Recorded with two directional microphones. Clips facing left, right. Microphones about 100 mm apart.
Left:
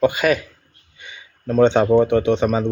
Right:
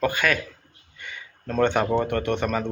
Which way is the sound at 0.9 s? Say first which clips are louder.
Right 1 dB; 15° left (ahead or behind).